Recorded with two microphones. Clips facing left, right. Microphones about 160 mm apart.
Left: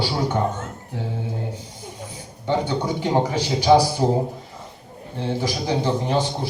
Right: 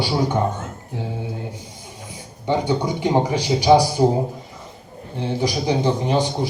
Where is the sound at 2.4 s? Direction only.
15° right (ahead or behind).